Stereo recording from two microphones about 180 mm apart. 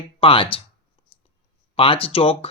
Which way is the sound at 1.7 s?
30° left (ahead or behind).